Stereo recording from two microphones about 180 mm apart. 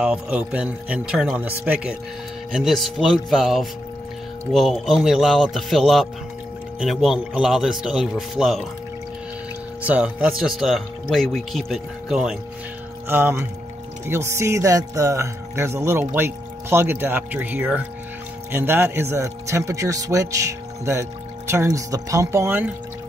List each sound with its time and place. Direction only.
0.0 s speech: 5° right (ahead or behind)
9.8 s speech: 5° right (ahead or behind)
13.1 s speech: 15° right (ahead or behind)